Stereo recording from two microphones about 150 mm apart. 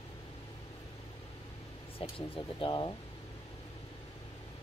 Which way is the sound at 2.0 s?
40° left (ahead or behind).